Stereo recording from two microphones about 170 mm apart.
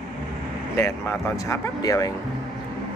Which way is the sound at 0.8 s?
15° left (ahead or behind).